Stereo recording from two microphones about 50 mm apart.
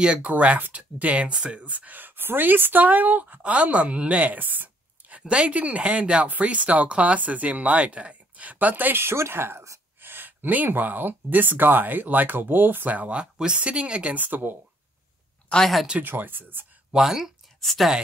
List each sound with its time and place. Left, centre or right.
0.0 s speech: centre
0.3 s speech: right
1.6 s speech: right
5.3 s speech: right
8.9 s speech: right
9.4 s speech: right
13.2 s speech: centre
14.1 s speech: right
15.6 s speech: centre
16.0 s speech: right
16.9 s speech: centre
17.6 s a woman's voice: centre